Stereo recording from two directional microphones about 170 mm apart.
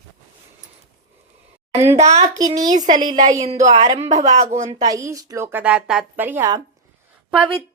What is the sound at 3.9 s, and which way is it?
Speech, 40° right (ahead or behind).